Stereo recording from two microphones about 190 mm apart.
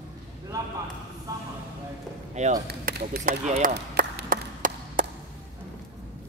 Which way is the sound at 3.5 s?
45° right (ahead or behind).